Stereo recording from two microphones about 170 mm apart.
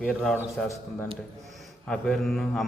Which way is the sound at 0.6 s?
15° left (ahead or behind).